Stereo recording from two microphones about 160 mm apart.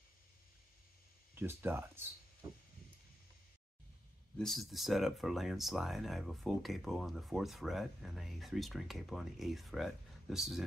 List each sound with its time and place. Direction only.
1.3 s speech: 15° right (ahead or behind)
2.4 s a sound: 25° right (ahead or behind)
4.4 s speech: centre (ahead or behind)